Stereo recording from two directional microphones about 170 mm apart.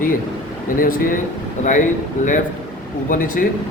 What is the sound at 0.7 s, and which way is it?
A man's voice, 55° left (ahead or behind).